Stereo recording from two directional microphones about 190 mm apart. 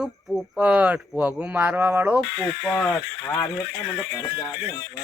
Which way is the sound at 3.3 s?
15° left (ahead or behind).